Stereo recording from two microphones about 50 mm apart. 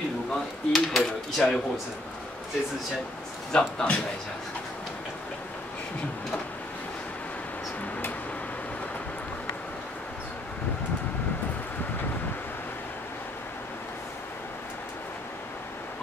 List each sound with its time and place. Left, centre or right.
0.3 s cutlery: centre
3.5 s a man's voice: centre